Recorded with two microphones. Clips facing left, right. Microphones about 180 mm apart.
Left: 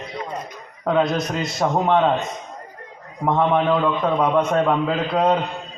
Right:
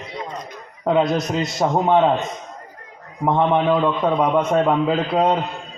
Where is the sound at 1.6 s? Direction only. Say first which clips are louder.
Right 1 dB; 10° right (ahead or behind).